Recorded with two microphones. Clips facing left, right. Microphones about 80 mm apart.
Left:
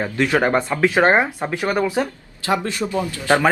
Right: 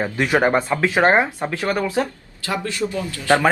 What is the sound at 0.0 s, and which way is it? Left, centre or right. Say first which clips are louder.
Speech: even; centre.